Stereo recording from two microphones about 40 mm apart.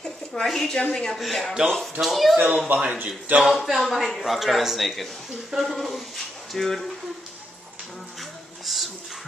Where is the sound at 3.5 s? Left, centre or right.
Centre.